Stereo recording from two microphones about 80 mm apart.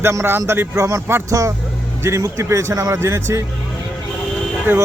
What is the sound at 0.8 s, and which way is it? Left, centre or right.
A man's voice, right.